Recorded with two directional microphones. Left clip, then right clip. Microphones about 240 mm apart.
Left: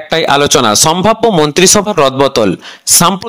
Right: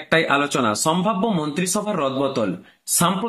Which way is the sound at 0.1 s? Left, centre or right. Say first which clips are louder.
Left 9 dB; left.